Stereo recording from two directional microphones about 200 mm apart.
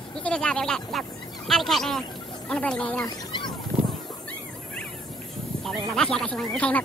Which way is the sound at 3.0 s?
20° left (ahead or behind).